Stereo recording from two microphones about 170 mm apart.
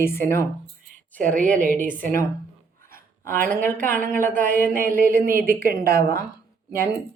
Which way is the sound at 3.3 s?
55° right (ahead or behind).